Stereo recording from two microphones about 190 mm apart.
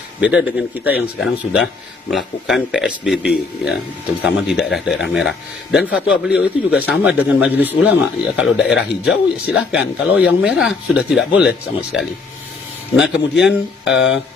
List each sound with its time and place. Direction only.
0.2 s speech: 5° right (ahead or behind)
13.4 s speech: 5° right (ahead or behind)
13.9 s speech: 70° left (ahead or behind)